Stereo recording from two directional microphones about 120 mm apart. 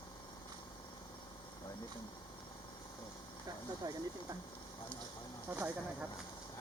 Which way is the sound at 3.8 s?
35° right (ahead or behind).